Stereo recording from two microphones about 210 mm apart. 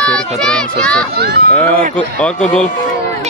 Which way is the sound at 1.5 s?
5° left (ahead or behind).